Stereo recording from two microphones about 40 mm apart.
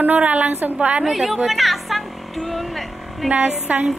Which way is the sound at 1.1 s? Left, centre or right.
Centre.